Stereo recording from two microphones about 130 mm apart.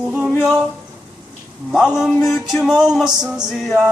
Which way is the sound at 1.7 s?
5° right (ahead or behind).